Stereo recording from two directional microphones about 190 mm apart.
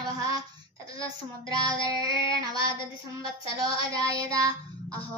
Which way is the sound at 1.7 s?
20° right (ahead or behind).